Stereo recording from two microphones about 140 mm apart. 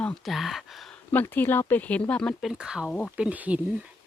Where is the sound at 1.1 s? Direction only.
15° left (ahead or behind).